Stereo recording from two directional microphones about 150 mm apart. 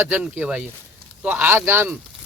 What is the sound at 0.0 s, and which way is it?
Speech, 10° right (ahead or behind).